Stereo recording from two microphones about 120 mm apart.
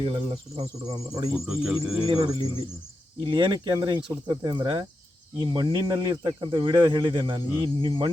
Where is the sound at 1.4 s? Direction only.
5° right (ahead or behind).